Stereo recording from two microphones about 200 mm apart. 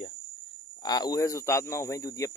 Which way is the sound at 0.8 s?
20° left (ahead or behind).